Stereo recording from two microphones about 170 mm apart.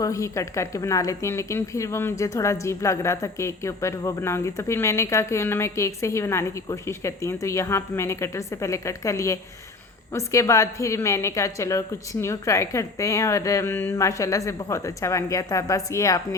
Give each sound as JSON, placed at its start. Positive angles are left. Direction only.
{"t": 0.0, "sound": "a woman's voice", "side_deg": 20}